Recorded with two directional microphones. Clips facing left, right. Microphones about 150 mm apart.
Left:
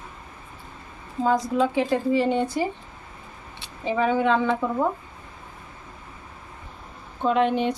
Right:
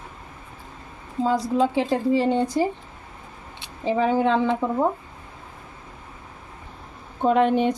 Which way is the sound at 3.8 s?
35° right (ahead or behind).